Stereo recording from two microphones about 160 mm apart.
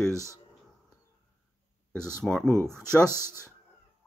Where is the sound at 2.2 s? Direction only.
5° left (ahead or behind).